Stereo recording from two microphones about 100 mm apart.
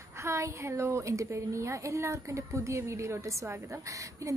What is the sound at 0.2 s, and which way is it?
A woman's voice, 30° right (ahead or behind).